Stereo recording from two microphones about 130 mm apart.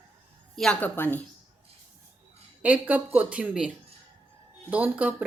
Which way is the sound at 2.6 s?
10° right (ahead or behind).